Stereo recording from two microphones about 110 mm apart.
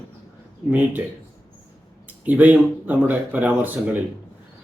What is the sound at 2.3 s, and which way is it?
A man's voice, 15° right (ahead or behind).